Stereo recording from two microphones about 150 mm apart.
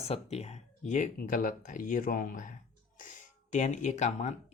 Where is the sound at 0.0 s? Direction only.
45° left (ahead or behind).